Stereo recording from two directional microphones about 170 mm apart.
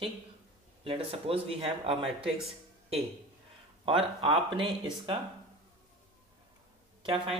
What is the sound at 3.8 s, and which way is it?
Speech, 30° right (ahead or behind).